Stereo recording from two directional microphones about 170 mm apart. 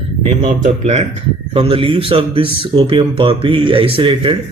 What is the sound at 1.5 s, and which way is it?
Speech, 30° right (ahead or behind).